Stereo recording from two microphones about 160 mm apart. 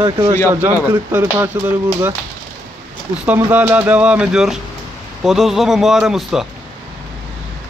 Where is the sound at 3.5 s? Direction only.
10° right (ahead or behind).